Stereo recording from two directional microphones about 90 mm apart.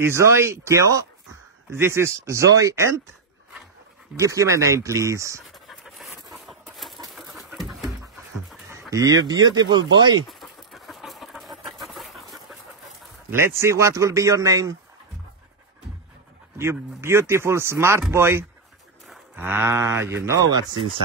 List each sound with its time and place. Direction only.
0.0 s a man's voice: 30° right (ahead or behind)
4.2 s a man's voice: 35° right (ahead or behind)
5.4 s dog: centre (ahead or behind)
8.9 s speech: 40° right (ahead or behind)
10.4 s a sound: centre (ahead or behind)
13.3 s a man's voice: 30° right (ahead or behind)
16.5 s speech: 30° right (ahead or behind)
20.3 s speech: 45° right (ahead or behind)